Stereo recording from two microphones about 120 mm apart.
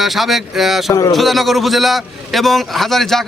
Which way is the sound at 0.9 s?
30° left (ahead or behind).